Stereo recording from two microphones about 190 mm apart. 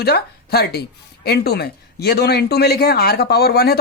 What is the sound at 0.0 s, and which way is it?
Speech, 60° left (ahead or behind).